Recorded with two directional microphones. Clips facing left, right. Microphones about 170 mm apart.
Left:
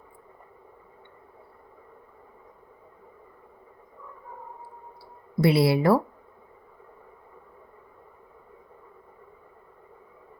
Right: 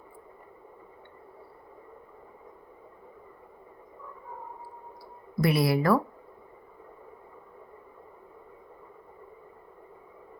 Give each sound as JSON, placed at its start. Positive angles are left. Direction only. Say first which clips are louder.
{"t": 5.4, "sound": "speech", "louder": "left 4 dB", "side_deg": 30}